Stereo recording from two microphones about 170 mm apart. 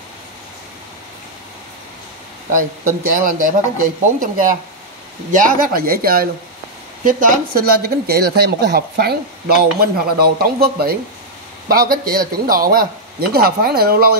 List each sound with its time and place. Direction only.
2.5 s speech: 55° right (ahead or behind)